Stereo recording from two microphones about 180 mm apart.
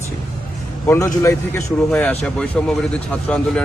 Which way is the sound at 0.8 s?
15° left (ahead or behind).